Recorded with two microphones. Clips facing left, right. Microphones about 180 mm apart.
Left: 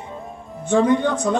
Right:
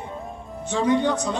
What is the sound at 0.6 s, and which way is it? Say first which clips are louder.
Speech: left 4 dB; 55° left (ahead or behind).